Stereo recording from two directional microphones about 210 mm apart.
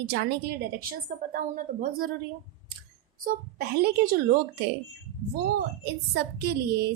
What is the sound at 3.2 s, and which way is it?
Speech, 45° right (ahead or behind).